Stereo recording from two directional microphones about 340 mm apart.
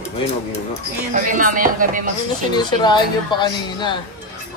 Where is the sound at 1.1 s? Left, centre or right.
Right.